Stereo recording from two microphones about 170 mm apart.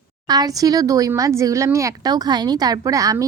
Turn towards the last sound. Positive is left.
turn(degrees=-20)  # may be behind; listen again after turning